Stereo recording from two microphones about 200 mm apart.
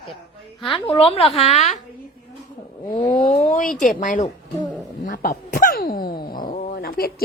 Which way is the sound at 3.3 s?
40° left (ahead or behind).